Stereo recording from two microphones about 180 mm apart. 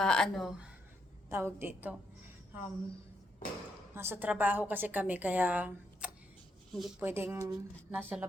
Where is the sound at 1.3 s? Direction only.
15° right (ahead or behind).